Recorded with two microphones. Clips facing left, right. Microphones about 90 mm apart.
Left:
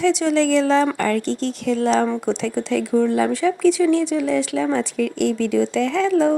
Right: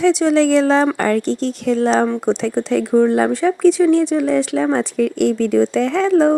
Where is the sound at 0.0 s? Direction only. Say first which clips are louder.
Right 4 dB; 40° right (ahead or behind).